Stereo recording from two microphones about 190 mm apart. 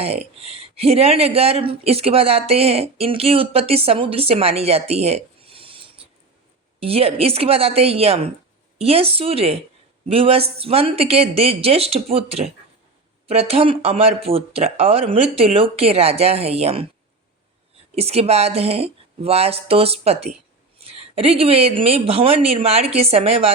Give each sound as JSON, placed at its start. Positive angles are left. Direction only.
{"t": 0.0, "sound": "speech", "side_deg": -35}
{"t": 17.9, "sound": "speech", "side_deg": -30}